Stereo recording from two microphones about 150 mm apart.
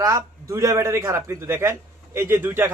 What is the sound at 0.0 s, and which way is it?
A man's voice, 20° right (ahead or behind).